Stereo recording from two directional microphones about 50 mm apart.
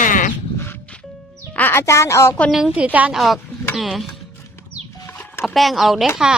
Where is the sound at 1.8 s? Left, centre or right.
Left.